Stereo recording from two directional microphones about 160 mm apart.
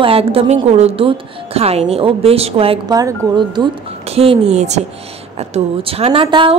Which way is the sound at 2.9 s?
25° right (ahead or behind).